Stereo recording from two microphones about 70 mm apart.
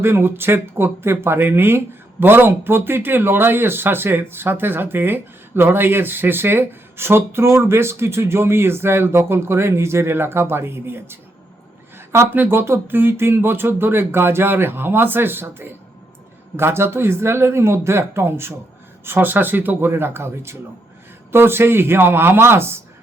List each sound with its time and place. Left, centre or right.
0.0 s speech: right
11.9 s a sound: right
12.4 s speech: right